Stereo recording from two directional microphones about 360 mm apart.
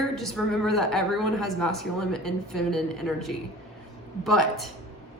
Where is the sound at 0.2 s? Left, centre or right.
Centre.